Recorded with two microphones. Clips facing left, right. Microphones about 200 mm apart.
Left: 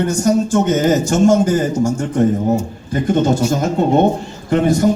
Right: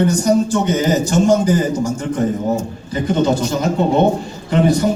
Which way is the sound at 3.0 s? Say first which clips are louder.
Left 1 dB; 50° left (ahead or behind).